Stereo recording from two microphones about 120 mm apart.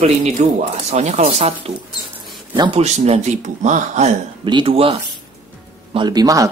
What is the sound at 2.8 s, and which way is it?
Speech, 70° right (ahead or behind).